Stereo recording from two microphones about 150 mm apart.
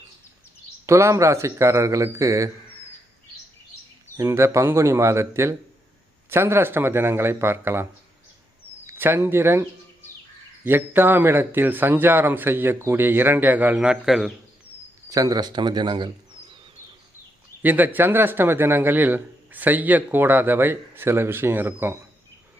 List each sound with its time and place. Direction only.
0.9 s speech: 20° right (ahead or behind)
4.2 s speech: 20° right (ahead or behind)
8.9 s speech: 15° right (ahead or behind)
15.1 s speech: 25° right (ahead or behind)
17.6 s speech: 10° right (ahead or behind)